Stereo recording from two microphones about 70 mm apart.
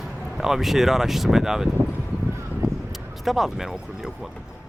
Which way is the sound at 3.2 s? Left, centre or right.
Centre.